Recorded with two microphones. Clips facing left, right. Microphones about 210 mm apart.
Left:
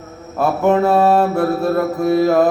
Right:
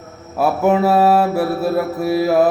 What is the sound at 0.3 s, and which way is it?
Mantra, 5° right (ahead or behind).